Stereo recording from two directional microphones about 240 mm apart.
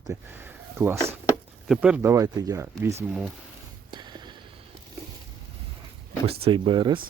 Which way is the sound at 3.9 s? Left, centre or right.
Centre.